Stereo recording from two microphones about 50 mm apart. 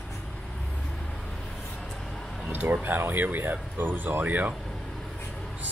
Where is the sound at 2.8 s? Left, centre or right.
Right.